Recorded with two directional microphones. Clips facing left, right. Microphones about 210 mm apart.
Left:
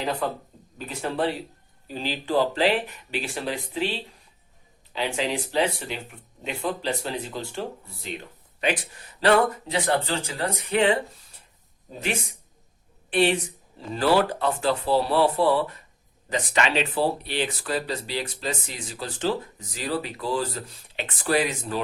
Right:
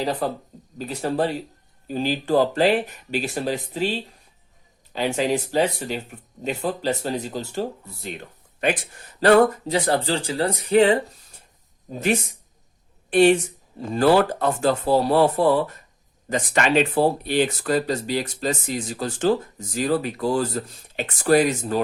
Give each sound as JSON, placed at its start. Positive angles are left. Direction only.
{"t": 0.0, "sound": "speech", "side_deg": -35}
{"t": 13.1, "sound": "speech", "side_deg": -45}